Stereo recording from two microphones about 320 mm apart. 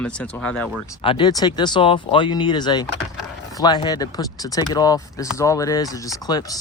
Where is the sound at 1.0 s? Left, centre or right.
Centre.